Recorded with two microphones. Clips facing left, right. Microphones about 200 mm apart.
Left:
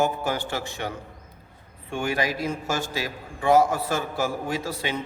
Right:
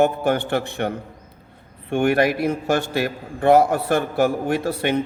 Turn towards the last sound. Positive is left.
turn(degrees=-60)  # may be behind; listen again after turning